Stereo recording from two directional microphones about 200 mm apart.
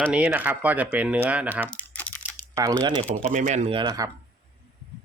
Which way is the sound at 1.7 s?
10° left (ahead or behind).